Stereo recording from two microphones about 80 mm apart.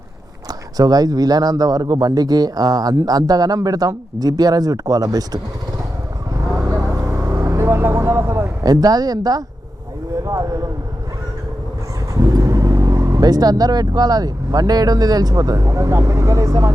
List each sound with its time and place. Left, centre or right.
0.8 s speech: right
6.6 s vehicle: right
8.6 s speech: right
12.3 s speech: right